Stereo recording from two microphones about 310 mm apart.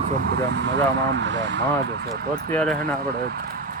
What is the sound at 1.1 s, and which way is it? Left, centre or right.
Speech, right.